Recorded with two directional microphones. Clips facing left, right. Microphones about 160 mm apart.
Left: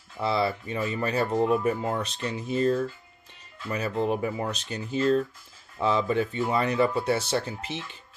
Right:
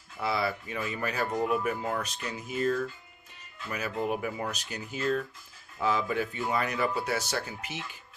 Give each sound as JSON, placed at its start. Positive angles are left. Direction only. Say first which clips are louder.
{"t": 0.2, "sound": "speech", "louder": "left 4 dB", "side_deg": 25}